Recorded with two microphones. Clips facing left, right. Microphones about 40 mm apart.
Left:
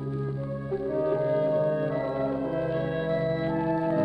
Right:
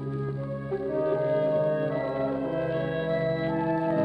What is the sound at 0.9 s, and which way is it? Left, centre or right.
Music, centre.